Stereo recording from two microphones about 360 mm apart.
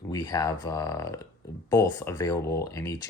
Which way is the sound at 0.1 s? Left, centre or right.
Centre.